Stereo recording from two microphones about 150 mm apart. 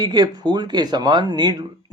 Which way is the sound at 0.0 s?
30° right (ahead or behind).